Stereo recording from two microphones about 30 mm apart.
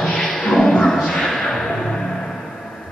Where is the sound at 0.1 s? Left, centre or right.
Left.